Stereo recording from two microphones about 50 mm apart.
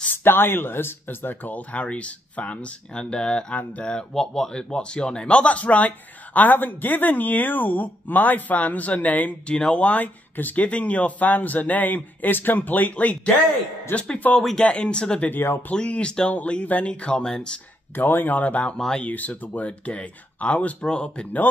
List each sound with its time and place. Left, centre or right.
0.1 s speech: left
4.1 s speech: centre; by 9.3 s left
9.5 s speech: left
17.9 s speech: left
18.8 s speech: centre
19.0 s speech: left